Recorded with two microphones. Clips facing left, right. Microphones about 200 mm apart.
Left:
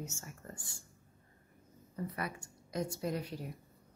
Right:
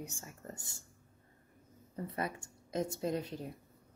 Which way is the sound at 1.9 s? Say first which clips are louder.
Right 1 dB; 25° right (ahead or behind).